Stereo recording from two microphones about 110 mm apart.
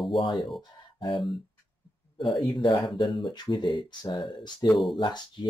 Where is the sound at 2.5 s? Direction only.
45° left (ahead or behind).